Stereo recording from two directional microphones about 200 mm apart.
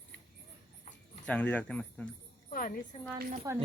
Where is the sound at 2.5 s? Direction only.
40° left (ahead or behind).